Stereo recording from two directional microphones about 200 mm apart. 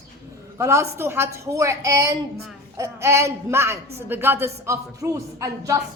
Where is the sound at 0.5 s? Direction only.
15° right (ahead or behind).